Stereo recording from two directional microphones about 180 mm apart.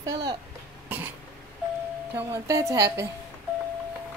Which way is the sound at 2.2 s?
15° right (ahead or behind).